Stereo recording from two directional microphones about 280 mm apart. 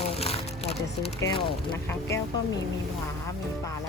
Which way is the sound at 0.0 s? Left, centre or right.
Left.